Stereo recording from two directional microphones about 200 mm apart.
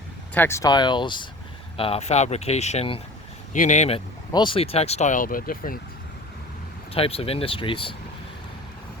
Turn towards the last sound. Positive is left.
turn(degrees=25)  # may be behind; listen again after turning